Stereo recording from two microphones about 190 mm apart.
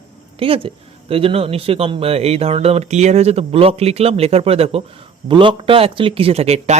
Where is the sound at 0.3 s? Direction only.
30° right (ahead or behind).